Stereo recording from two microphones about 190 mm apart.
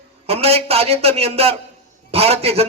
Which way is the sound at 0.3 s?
30° right (ahead or behind).